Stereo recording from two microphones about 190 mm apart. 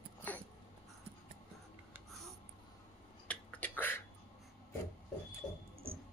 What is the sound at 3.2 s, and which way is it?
Finger snapping, 10° left (ahead or behind).